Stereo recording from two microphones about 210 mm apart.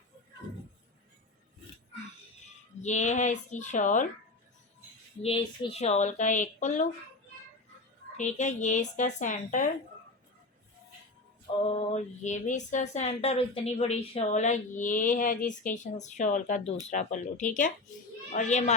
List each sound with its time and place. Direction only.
2.8 s speech: 35° left (ahead or behind)
5.2 s speech: 25° left (ahead or behind)
8.1 s speech: 35° left (ahead or behind)
11.7 s speech: 30° left (ahead or behind)